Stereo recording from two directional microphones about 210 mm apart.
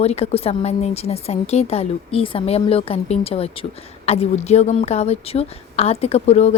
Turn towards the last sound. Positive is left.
turn(degrees=30)  # may be behind; listen again after turning